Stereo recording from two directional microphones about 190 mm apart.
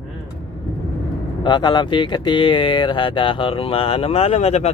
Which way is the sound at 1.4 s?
25° left (ahead or behind).